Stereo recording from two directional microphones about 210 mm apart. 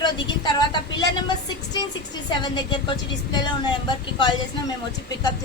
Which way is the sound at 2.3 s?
20° left (ahead or behind).